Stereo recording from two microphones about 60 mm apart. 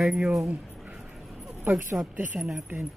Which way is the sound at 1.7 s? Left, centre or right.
Right.